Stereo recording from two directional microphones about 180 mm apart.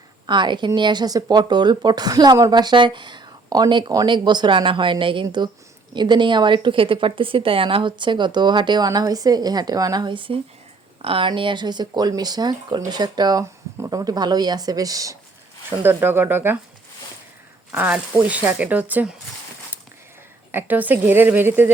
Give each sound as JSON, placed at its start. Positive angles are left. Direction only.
{"t": 0.3, "sound": "speech", "side_deg": -25}
{"t": 17.7, "sound": "speech", "side_deg": -10}
{"t": 20.5, "sound": "speech", "side_deg": -10}